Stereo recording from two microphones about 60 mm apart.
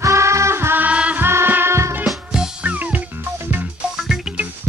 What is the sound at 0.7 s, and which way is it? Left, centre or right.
Music, right.